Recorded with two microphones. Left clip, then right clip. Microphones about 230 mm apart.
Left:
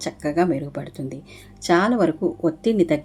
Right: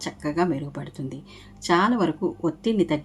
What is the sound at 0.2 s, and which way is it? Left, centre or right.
Speech, centre.